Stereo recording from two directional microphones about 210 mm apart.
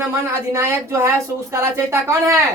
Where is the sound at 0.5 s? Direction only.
15° right (ahead or behind).